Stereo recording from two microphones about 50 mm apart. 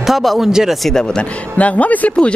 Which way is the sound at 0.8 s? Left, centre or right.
Centre.